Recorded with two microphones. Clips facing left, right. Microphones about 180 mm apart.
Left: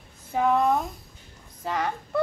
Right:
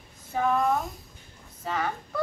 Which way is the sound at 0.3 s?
20° left (ahead or behind).